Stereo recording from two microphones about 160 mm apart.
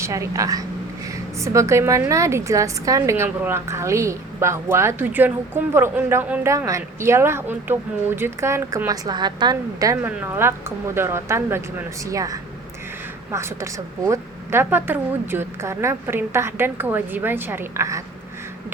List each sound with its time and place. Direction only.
0.0 s a woman's voice: 20° right (ahead or behind)